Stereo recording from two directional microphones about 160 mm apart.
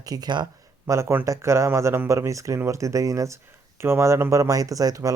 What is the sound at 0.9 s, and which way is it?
Speech, 15° right (ahead or behind).